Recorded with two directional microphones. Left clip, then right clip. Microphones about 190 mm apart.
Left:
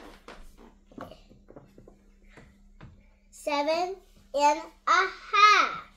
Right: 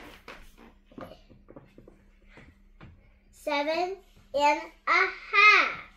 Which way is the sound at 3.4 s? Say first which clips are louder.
Left 1 dB; 10° left (ahead or behind).